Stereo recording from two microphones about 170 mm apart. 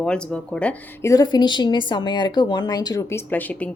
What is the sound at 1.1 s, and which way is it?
A woman's voice, 25° left (ahead or behind).